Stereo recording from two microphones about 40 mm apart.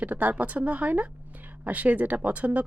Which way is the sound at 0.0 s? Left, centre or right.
Right.